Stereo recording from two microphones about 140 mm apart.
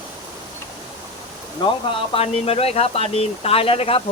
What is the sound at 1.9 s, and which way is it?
Speech, 40° left (ahead or behind).